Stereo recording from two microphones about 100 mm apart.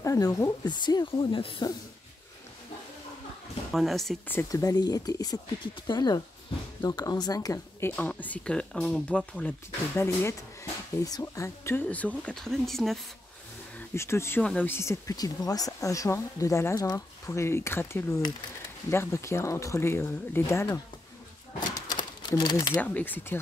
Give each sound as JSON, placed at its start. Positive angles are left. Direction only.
{"t": 0.0, "sound": "speech", "side_deg": 35}
{"t": 0.7, "sound": "speech", "side_deg": 45}
{"t": 3.7, "sound": "speech", "side_deg": 0}
{"t": 4.5, "sound": "speech", "side_deg": 35}
{"t": 7.8, "sound": "speech", "side_deg": 15}
{"t": 9.9, "sound": "speech", "side_deg": 30}
{"t": 12.4, "sound": "speech", "side_deg": 5}
{"t": 13.9, "sound": "speech", "side_deg": 25}
{"t": 14.4, "sound": "speech", "side_deg": 10}
{"t": 14.7, "sound": "speech", "side_deg": 30}
{"t": 21.8, "sound": "sewing machine", "side_deg": 45}
{"t": 22.8, "sound": "speech", "side_deg": 15}